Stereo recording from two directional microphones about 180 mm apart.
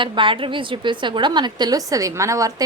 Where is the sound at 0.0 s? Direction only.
30° right (ahead or behind).